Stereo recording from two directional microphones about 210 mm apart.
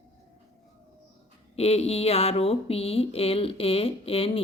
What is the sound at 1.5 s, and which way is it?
Speech, 30° left (ahead or behind).